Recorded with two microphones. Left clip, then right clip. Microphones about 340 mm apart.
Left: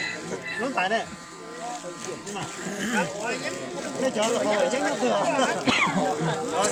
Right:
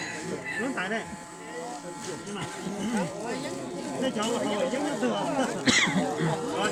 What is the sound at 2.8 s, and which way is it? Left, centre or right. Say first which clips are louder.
Speech: left 6 dB; left.